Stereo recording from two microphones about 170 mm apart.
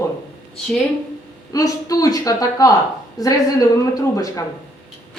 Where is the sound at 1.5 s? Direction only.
20° left (ahead or behind).